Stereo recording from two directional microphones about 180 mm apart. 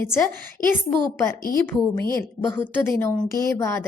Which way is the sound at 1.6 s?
10° left (ahead or behind).